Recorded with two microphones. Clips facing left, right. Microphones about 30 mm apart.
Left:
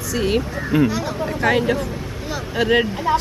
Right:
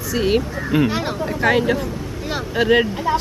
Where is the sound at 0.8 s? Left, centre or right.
Right.